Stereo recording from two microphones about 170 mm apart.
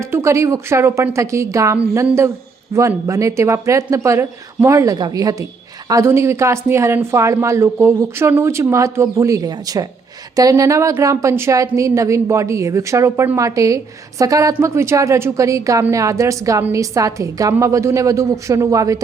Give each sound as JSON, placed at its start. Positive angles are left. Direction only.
{"t": 0.0, "sound": "a woman's voice", "side_deg": -15}